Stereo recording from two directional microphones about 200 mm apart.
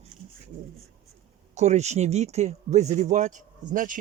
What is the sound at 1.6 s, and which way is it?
Speech, 35° right (ahead or behind).